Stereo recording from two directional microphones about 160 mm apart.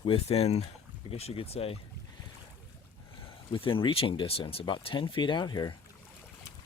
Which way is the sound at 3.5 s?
35° left (ahead or behind).